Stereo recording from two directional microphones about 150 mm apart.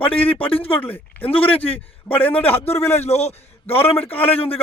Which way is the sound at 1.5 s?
40° left (ahead or behind).